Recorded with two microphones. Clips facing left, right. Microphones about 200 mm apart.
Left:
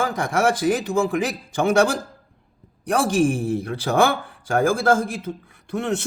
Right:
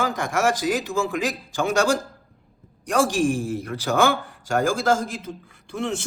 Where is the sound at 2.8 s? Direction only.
60° left (ahead or behind).